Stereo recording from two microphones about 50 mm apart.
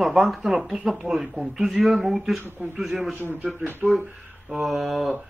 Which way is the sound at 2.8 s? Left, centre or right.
Centre.